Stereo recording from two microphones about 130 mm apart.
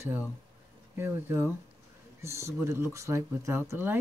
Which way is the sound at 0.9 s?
20° right (ahead or behind).